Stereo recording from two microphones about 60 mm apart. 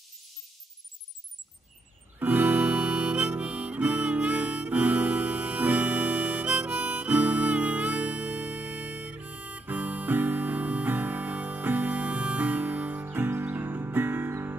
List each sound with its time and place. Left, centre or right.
2.1 s harmonica: right